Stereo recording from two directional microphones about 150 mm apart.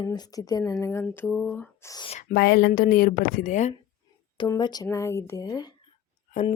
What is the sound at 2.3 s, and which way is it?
Speech, 90° left.